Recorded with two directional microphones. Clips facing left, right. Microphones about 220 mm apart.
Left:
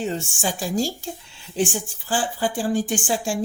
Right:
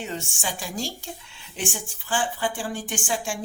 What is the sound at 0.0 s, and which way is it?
Speech, 35° left (ahead or behind).